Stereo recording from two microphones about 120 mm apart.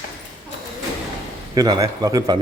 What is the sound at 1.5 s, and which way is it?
Speech, 35° right (ahead or behind).